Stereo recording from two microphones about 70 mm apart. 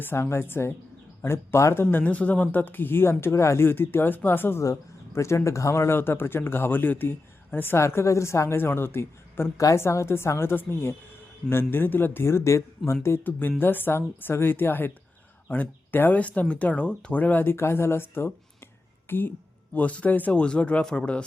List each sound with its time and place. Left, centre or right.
0.0 s speech: left
3.7 s speech: left
4.6 s speech: left
7.8 s speech: left
9.6 s a woman's voice: left
9.8 s speech: left
19.7 s speech: left